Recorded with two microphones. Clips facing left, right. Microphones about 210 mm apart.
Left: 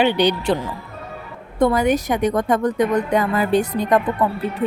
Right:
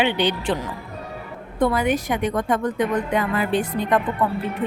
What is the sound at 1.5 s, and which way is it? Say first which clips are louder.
A woman's voice: left 3 dB; 40° left (ahead or behind).